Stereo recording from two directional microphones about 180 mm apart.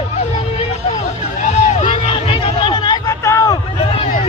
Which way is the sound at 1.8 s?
30° left (ahead or behind).